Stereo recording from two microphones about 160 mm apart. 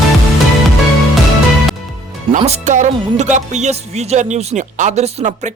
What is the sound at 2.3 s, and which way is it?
Speech, 45° right (ahead or behind).